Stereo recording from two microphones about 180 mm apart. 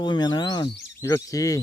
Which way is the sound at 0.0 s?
25° left (ahead or behind).